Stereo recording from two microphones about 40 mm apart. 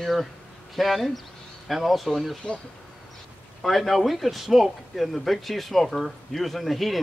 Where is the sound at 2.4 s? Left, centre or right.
Left.